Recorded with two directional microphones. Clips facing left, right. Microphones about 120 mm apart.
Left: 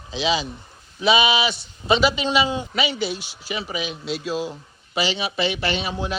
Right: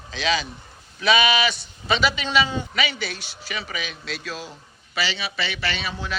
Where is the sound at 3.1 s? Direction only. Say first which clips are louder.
Left 5 dB; 10° left (ahead or behind).